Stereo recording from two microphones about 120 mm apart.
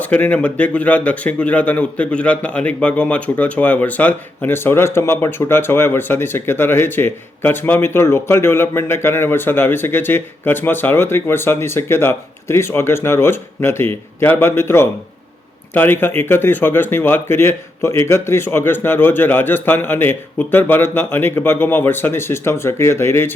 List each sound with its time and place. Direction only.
0.0 s speech: 15° left (ahead or behind)